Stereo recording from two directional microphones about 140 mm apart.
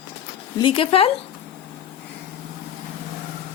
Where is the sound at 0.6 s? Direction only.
40° left (ahead or behind).